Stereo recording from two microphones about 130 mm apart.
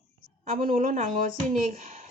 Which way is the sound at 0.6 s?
85° right.